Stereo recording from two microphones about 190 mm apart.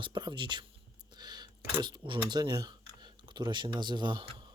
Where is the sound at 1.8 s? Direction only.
25° right (ahead or behind).